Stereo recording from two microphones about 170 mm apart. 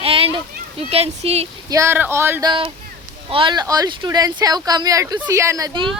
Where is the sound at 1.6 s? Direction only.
15° right (ahead or behind).